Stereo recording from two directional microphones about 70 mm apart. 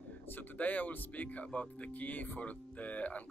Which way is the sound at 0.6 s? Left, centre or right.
Left.